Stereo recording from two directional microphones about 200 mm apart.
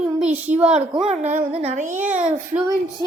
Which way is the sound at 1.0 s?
35° right (ahead or behind).